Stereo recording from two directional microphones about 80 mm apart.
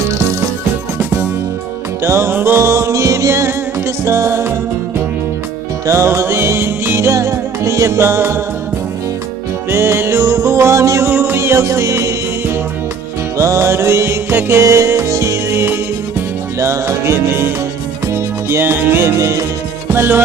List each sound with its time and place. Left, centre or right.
2.0 s music: right
5.8 s music: right
9.6 s music: right
11.1 s music: right
19.1 s music: right
19.9 s music: right